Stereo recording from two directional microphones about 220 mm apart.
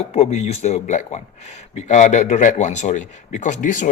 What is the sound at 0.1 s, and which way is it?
A man's voice, 30° left (ahead or behind).